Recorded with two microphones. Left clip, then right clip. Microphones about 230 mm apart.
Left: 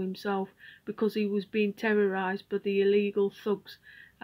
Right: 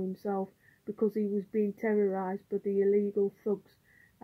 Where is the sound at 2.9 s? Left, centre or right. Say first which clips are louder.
Left 2 dB; centre.